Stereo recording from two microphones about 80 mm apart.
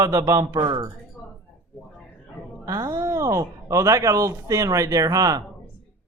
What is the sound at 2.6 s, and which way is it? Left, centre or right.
Speech, right.